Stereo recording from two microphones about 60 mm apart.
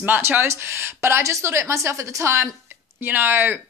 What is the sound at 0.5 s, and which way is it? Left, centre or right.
A woman's voice, right.